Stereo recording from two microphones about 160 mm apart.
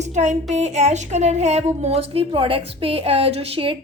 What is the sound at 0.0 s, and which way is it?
Speech, 45° right (ahead or behind).